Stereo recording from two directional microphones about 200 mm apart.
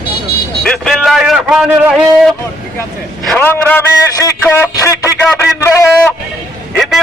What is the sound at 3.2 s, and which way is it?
A man's voice, 5° left (ahead or behind).